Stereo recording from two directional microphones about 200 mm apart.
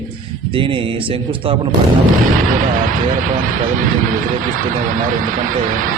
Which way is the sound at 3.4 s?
40° right (ahead or behind).